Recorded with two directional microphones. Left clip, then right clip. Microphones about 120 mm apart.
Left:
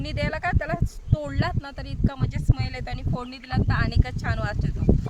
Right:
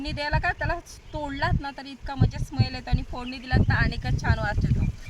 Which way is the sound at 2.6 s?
55° left (ahead or behind).